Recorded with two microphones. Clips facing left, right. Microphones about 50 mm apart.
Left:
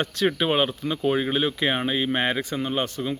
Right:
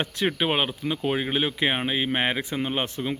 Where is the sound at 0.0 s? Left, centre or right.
Centre.